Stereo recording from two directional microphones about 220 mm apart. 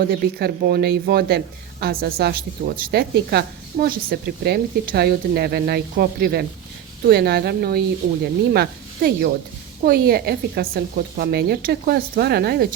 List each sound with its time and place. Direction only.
0.0 s a woman's voice: 45° right (ahead or behind)